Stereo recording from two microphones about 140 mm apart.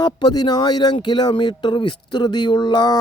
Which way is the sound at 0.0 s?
30° left (ahead or behind).